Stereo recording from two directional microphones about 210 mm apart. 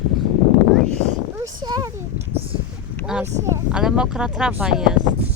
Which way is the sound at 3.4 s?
15° right (ahead or behind).